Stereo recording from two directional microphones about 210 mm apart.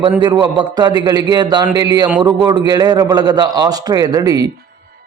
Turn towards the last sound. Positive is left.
turn(degrees=-15)  # may be behind; listen again after turning